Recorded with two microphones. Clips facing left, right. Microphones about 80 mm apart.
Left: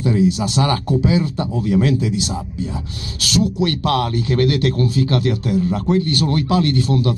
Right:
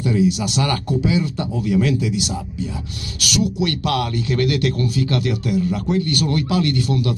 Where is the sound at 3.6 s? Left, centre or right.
Left.